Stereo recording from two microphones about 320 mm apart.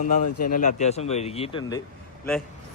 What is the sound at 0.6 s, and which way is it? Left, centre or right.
Speech, left.